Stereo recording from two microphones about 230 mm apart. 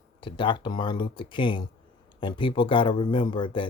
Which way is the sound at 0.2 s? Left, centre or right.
Left.